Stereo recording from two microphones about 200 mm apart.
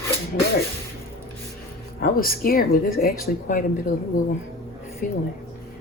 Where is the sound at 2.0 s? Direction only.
45° left (ahead or behind).